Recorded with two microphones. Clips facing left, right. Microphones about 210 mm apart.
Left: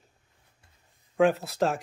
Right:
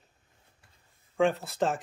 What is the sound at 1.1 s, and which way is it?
Speech, 5° left (ahead or behind).